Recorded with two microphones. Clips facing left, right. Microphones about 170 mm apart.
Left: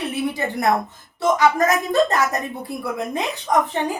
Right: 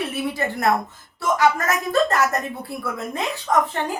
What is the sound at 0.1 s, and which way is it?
A woman's voice, 15° left (ahead or behind).